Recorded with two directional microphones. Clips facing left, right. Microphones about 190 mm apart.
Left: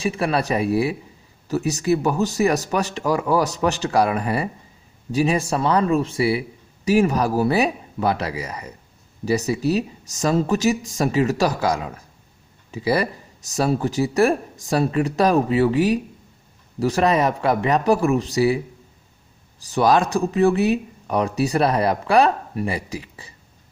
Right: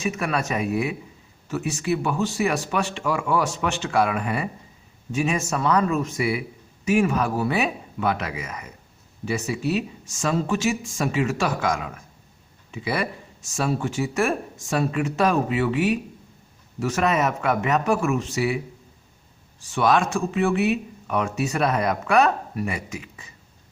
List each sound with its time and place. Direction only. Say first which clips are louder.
0.0 s speech: left 4 dB; 30° left (ahead or behind)